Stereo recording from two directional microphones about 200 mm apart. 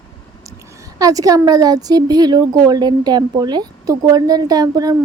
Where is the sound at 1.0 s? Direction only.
15° right (ahead or behind).